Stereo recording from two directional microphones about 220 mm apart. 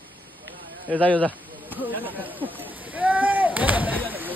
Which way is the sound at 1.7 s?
10° right (ahead or behind).